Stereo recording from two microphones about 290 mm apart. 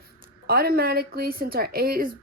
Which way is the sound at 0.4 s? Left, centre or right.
Right.